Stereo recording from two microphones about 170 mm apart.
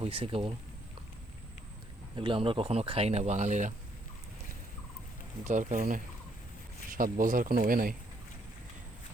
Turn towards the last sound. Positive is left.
turn(degrees=-55)  # may be behind; listen again after turning